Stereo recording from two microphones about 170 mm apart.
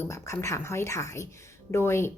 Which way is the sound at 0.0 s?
20° left (ahead or behind).